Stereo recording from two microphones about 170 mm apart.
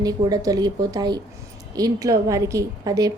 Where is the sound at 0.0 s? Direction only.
20° right (ahead or behind).